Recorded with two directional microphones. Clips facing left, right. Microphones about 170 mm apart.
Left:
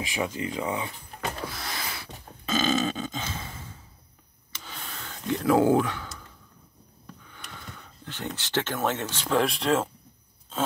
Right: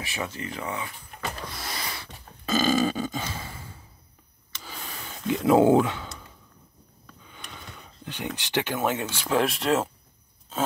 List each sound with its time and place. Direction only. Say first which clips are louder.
0.0 s speech: left 4 dB; 15° left (ahead or behind)
1.4 s snort: left 1 dB; centre (ahead or behind)
2.4 s burping: right 3 dB; 5° right (ahead or behind)
4.6 s a sound: right 1 dB; 5° right (ahead or behind)
7.2 s speech: right 2 dB; 20° right (ahead or behind); by 9.8 s centre (ahead or behind)